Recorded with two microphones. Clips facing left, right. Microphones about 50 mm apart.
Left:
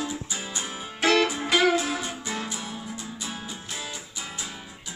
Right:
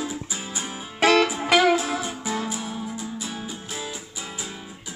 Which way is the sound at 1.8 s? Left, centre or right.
Centre.